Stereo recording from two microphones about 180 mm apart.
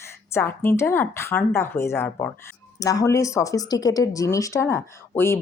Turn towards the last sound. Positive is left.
turn(degrees=15)  # may be behind; listen again after turning